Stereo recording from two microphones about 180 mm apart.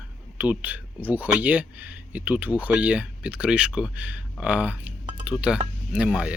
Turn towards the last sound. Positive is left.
turn(degrees=-5)  # may be behind; listen again after turning